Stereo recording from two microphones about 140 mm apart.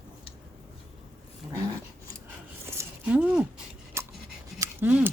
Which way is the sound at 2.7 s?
15° right (ahead or behind).